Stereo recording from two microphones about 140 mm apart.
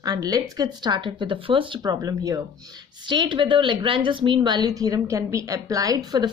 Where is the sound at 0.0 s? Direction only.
25° right (ahead or behind).